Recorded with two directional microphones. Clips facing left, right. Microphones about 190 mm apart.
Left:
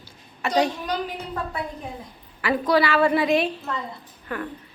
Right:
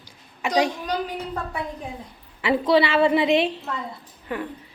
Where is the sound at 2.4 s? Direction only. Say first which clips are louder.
Right 2 dB; 25° right (ahead or behind).